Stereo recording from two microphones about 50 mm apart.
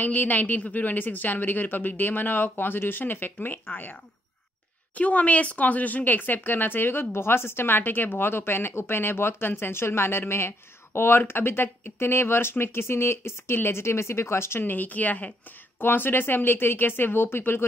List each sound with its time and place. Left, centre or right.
0.0 s a woman's voice: left
14.6 s a woman's voice: left
15.8 s speech: left